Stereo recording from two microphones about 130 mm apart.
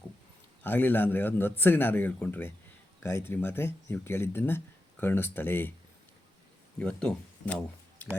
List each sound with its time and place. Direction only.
0.6 s speech: 15° left (ahead or behind)
6.7 s speech: 5° left (ahead or behind)